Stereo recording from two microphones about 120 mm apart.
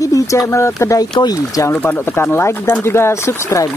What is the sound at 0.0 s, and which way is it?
Speech, 30° left (ahead or behind).